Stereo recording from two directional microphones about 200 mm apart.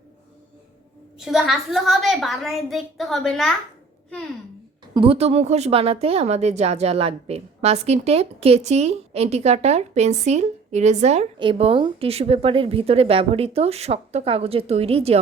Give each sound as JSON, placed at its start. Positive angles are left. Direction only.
{"t": 1.2, "sound": "a woman's voice", "side_deg": 0}
{"t": 4.9, "sound": "a woman's voice", "side_deg": -30}